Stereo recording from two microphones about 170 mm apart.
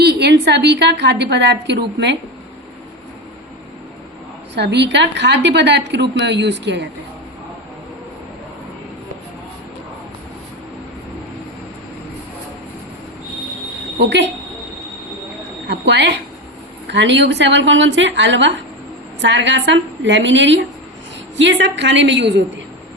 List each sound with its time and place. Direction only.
0.0 s a woman's voice: 75° right (ahead or behind)
4.5 s a woman's voice: 80° right
15.6 s a woman's voice: 90° right